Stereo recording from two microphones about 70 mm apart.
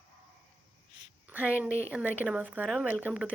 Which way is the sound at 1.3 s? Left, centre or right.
Right.